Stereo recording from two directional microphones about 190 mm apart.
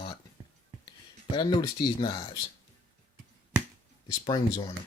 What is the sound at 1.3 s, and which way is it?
Speech, 25° left (ahead or behind).